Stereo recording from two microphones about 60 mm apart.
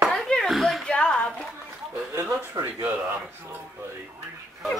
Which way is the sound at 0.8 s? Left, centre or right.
Centre.